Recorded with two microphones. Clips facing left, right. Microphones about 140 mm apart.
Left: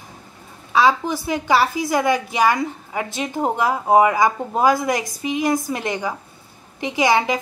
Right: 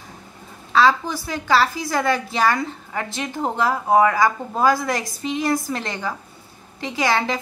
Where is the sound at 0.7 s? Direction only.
15° left (ahead or behind).